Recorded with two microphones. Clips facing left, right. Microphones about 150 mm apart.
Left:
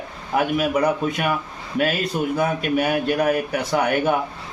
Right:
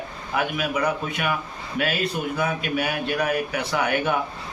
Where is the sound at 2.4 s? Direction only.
45° left (ahead or behind).